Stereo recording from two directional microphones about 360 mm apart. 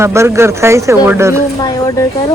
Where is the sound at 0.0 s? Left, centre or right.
Centre.